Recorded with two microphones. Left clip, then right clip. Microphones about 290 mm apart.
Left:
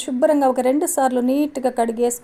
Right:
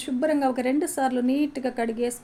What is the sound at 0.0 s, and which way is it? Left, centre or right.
A woman's voice, left.